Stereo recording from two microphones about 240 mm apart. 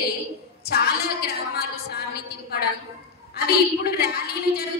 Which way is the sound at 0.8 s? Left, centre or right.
Left.